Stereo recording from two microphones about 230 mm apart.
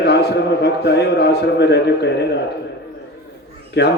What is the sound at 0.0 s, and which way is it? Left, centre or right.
A man's voice, left.